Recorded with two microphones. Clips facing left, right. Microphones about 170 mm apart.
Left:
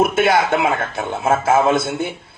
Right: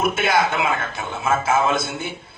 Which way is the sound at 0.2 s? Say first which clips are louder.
Left 4 dB; 50° left (ahead or behind).